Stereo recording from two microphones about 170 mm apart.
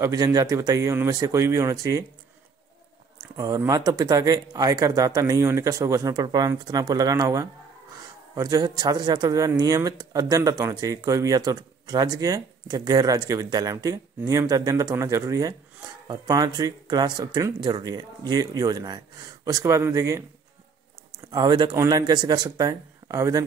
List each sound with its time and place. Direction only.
0.0 s speech: 20° right (ahead or behind)
3.3 s speech: 20° right (ahead or behind)
21.3 s speech: 25° right (ahead or behind)